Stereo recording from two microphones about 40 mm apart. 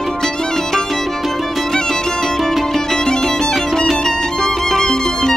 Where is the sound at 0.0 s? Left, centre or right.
Centre.